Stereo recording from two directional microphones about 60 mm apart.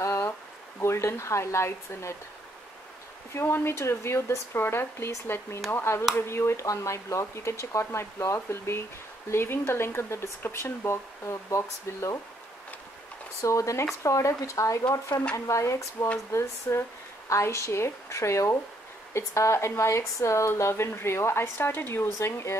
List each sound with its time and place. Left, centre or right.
0.0 s a sound: left
0.7 s speech: left
3.3 s speech: left
6.6 s a woman's voice: left
13.4 s a woman's voice: left